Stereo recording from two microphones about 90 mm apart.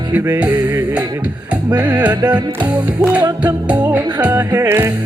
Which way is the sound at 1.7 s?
15° right (ahead or behind).